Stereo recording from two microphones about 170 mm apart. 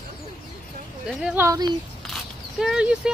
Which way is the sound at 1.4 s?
20° right (ahead or behind).